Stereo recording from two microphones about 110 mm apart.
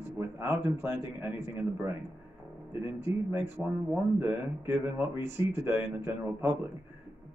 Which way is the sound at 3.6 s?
Centre (ahead or behind).